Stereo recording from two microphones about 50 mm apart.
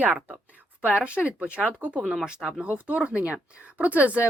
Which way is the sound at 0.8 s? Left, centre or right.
Right.